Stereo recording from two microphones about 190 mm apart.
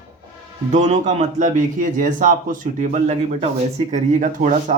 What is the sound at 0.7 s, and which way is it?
Speech, 40° right (ahead or behind).